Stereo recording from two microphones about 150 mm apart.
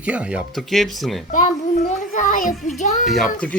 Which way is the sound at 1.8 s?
60° left (ahead or behind).